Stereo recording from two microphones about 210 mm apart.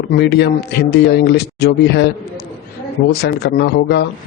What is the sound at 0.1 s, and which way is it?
Speech, 50° left (ahead or behind).